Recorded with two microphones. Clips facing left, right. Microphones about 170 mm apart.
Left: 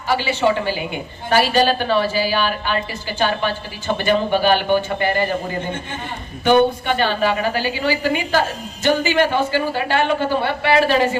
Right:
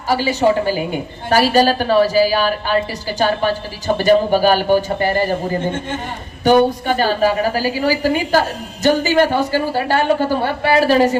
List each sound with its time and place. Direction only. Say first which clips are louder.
0.1 s a woman's voice: right 3 dB; 40° right (ahead or behind)
6.7 s a woman's voice: right 3 dB; 40° right (ahead or behind)